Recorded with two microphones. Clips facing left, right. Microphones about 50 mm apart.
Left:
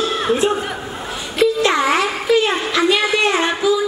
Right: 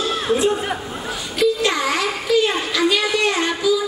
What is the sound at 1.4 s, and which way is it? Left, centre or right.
Wail, left.